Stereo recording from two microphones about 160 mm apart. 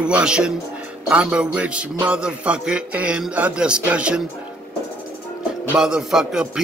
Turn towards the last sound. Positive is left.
turn(degrees=-5)  # may be behind; listen again after turning